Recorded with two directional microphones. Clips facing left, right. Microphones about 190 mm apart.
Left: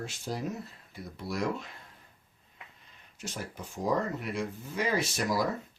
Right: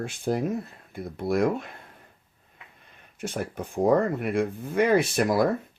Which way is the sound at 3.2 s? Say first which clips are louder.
Right 9 dB; 55° right (ahead or behind).